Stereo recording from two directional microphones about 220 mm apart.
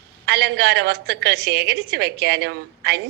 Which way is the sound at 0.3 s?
50° right (ahead or behind).